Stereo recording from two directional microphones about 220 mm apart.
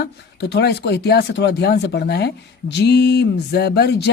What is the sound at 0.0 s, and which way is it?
Speech, 50° left (ahead or behind).